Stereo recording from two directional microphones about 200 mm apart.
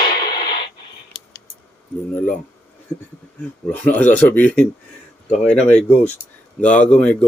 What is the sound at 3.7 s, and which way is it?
Speech, 10° left (ahead or behind).